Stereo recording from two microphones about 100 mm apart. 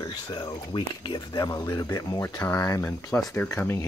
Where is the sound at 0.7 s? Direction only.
50° left (ahead or behind).